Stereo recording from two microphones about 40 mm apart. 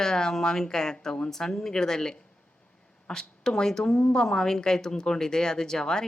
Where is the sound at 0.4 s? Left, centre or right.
Centre.